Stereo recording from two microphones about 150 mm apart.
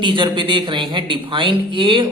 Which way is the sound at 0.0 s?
35° right (ahead or behind).